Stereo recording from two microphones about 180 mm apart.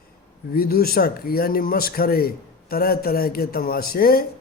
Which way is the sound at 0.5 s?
55° left (ahead or behind).